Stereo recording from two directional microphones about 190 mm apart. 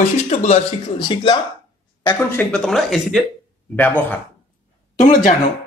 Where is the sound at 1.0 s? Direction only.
25° left (ahead or behind).